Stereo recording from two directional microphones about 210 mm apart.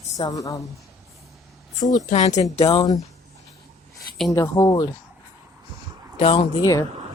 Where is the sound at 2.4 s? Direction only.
15° left (ahead or behind).